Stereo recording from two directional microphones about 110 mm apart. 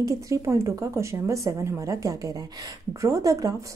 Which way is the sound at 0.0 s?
30° right (ahead or behind).